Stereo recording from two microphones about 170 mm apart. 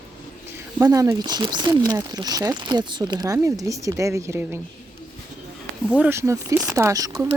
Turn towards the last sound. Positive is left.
turn(degrees=-20)  # may be behind; listen again after turning